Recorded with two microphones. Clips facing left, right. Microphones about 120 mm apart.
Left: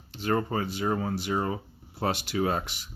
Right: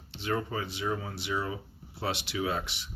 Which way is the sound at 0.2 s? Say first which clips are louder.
Left 5 dB; 50° left (ahead or behind).